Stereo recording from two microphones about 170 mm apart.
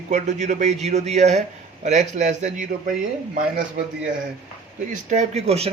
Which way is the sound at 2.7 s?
55° right (ahead or behind).